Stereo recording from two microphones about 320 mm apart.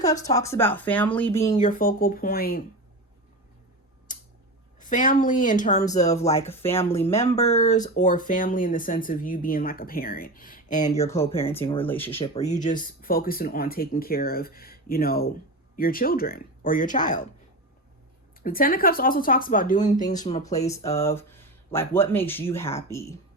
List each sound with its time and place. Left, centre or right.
0.0 s speech: centre
1.5 s speech: left
4.1 s tick-tock: left
4.8 s speech: left
6.1 s speech: centre
11.0 s speech: centre
12.2 s speech: centre
18.4 s speech: left; by 23.1 s centre